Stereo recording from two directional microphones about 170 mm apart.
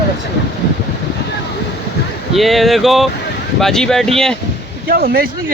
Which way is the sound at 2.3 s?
Centre (ahead or behind).